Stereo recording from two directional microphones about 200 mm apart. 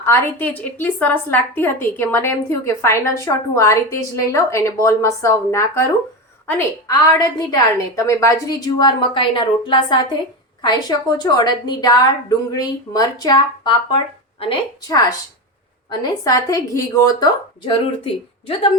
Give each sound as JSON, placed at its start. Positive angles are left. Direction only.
{"t": 0.0, "sound": "a woman's voice", "side_deg": 10}
{"t": 16.2, "sound": "a woman's voice", "side_deg": 15}
{"t": 17.7, "sound": "a woman's voice", "side_deg": 25}